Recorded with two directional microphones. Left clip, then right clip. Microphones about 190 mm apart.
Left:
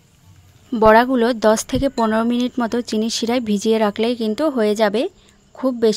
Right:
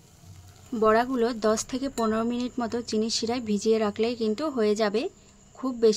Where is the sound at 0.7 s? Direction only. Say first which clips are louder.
Left 10 dB; 50° left (ahead or behind).